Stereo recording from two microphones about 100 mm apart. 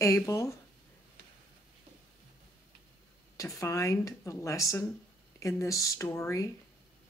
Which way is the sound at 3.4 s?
30° left (ahead or behind).